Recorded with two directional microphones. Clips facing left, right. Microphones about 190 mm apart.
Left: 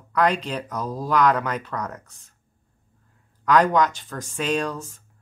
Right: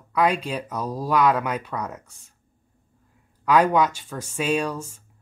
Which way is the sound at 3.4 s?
10° right (ahead or behind).